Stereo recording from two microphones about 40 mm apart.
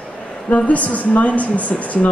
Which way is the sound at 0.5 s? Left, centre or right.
Left.